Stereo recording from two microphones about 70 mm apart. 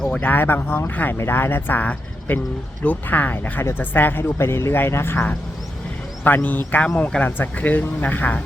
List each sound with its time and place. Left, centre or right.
0.2 s speech: left
6.2 s speech: left
6.8 s speech: centre
7.3 s speech: left